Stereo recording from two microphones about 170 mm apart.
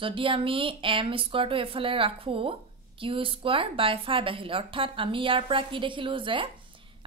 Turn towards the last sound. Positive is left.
turn(degrees=-30)  # may be behind; listen again after turning